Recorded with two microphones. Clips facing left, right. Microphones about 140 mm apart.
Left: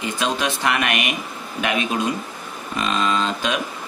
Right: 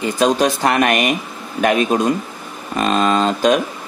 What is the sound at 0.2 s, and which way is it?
Speech, 40° right (ahead or behind).